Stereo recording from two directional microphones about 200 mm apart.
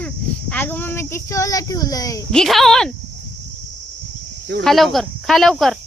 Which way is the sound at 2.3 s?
Centre (ahead or behind).